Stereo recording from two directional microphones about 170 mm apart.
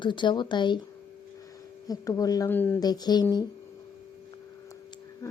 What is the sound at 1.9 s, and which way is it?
Speech, 20° left (ahead or behind).